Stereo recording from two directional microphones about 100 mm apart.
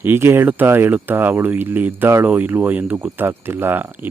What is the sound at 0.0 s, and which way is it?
Speech, 25° right (ahead or behind).